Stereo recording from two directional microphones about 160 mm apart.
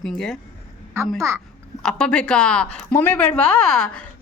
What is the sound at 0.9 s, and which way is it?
Speech, 15° right (ahead or behind).